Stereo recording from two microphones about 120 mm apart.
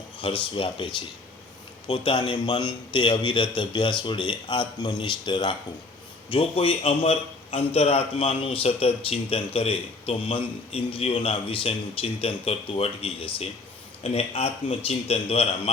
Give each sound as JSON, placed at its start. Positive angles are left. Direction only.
{"t": 0.2, "sound": "a man's voice", "side_deg": 50}